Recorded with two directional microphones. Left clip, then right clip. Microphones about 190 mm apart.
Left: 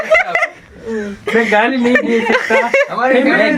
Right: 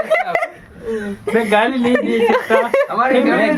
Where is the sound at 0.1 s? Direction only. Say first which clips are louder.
Left 6 dB; 10° right (ahead or behind).